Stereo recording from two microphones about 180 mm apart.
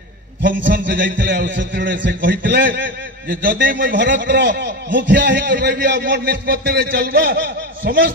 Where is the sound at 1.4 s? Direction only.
90° right.